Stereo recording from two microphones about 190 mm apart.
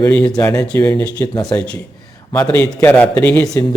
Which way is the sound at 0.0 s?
15° left (ahead or behind).